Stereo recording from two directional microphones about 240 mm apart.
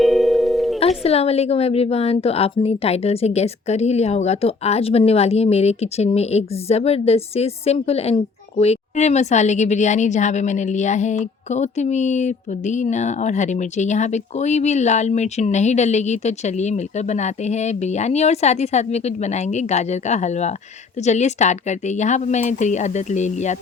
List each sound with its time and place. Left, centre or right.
0.0 s music: centre
0.8 s a woman's voice: left